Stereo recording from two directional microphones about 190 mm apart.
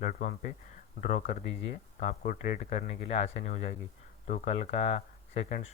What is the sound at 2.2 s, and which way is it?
Speech, 45° left (ahead or behind).